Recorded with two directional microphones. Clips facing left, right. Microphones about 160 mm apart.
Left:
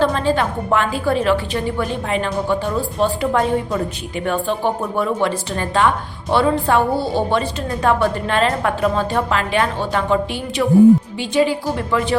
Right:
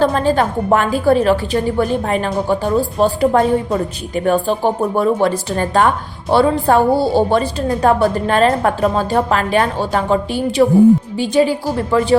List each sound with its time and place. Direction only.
0.0 s a woman's voice: 45° right (ahead or behind)